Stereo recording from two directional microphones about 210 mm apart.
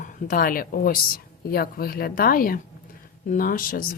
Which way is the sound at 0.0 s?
40° left (ahead or behind).